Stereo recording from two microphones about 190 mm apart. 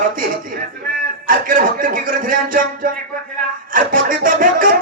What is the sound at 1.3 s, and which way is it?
Speech, 45° right (ahead or behind).